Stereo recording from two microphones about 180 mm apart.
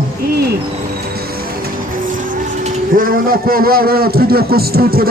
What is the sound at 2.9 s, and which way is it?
Speech, 50° right (ahead or behind).